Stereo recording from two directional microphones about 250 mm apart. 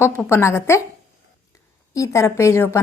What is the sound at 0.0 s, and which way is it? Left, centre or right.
Speech, centre.